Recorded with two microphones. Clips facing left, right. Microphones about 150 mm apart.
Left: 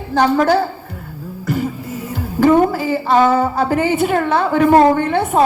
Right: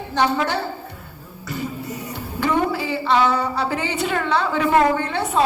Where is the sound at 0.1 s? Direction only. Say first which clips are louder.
Left 7 dB; 45° left (ahead or behind).